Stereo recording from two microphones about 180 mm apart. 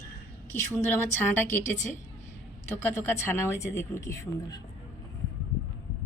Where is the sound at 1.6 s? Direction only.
40° left (ahead or behind).